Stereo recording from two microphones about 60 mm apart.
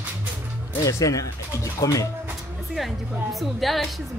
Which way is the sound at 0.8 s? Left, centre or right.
Left.